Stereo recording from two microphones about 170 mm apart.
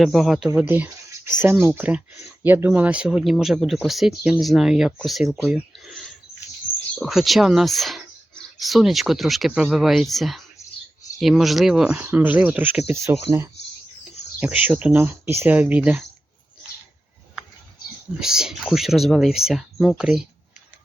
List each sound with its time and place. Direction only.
0.0 s speech: centre (ahead or behind)
0.7 s a sound: 10° right (ahead or behind)
1.4 s speech: 15° right (ahead or behind)
7.0 s speech: centre (ahead or behind)
18.2 s speech: 5° right (ahead or behind)